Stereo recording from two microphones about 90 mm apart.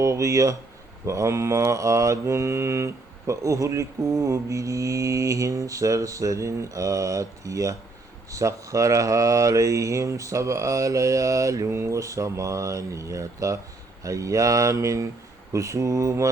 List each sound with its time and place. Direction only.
0.0 s mantra: 35° right (ahead or behind)